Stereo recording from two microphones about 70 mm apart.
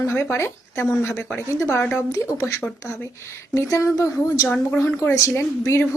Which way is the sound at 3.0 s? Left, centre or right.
Left.